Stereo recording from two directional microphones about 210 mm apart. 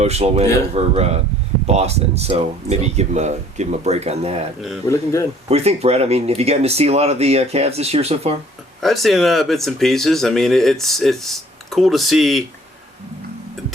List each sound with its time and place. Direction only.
0.0 s speech: 30° right (ahead or behind)
5.5 s speech: 30° right (ahead or behind)
8.8 s speech: centre (ahead or behind)